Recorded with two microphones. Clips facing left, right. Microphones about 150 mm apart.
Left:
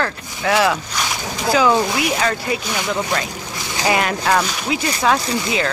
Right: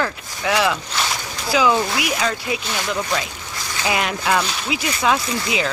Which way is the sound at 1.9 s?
Centre (ahead or behind).